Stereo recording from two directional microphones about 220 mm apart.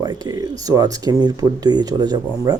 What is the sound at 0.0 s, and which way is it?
Speech, 20° right (ahead or behind).